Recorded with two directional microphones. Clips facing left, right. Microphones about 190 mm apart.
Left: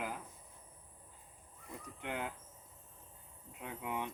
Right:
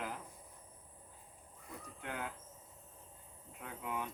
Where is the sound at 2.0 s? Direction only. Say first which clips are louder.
Left 3 dB; 20° left (ahead or behind).